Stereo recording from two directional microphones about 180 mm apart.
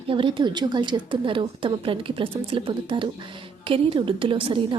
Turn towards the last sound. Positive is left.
turn(degrees=-30)  # may be behind; listen again after turning